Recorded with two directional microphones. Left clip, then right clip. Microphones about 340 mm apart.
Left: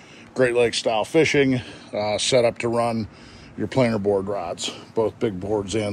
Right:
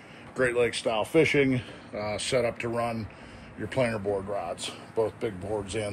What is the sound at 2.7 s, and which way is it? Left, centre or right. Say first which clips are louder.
Speech: left 7 dB; left.